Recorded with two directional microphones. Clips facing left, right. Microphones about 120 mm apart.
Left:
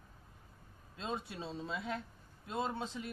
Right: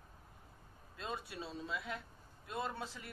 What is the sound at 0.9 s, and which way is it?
Speech, 25° left (ahead or behind).